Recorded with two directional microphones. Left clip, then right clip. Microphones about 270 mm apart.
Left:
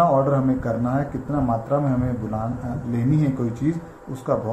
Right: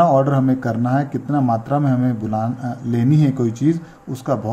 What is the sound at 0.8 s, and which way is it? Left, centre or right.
Speech, right.